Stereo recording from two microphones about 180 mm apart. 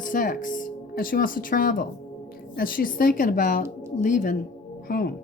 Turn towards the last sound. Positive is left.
turn(degrees=55)  # may be behind; listen again after turning